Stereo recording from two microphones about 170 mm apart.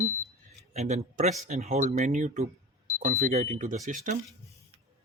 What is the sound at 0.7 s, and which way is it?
Speech, 40° right (ahead or behind).